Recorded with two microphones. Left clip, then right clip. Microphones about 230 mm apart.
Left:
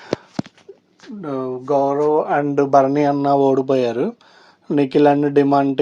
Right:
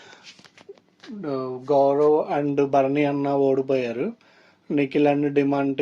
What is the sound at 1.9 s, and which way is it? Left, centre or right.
Speech, left.